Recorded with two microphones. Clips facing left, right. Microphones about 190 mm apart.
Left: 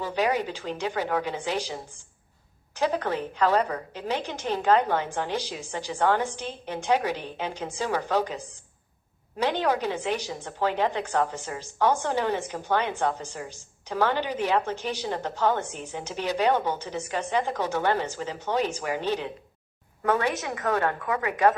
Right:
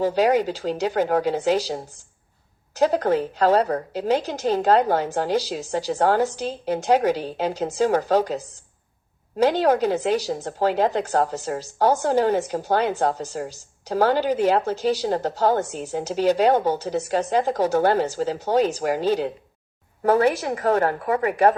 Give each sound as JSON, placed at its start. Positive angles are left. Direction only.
{"t": 0.0, "sound": "a woman's voice", "side_deg": -35}